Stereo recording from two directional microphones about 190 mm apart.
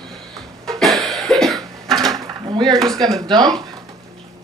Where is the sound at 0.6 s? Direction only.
Centre (ahead or behind).